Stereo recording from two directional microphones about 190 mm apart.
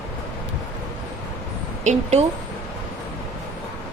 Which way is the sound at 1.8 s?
35° right (ahead or behind).